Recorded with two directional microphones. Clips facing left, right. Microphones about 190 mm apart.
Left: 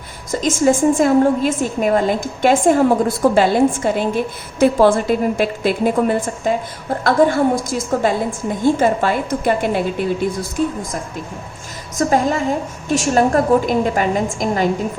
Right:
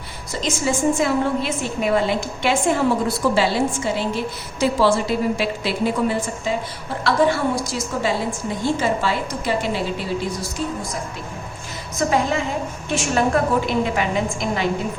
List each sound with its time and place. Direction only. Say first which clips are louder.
0.3 s a woman's voice: left 8 dB; 45° left (ahead or behind)
11.9 s a woman's voice: left 4 dB; 45° left (ahead or behind)